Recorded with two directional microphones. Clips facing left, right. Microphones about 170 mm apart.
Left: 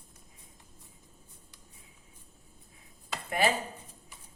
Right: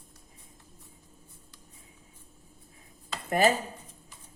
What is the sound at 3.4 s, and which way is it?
Speech, 45° right (ahead or behind).